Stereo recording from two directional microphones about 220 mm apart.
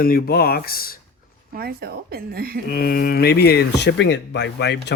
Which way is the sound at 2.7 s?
40° left (ahead or behind).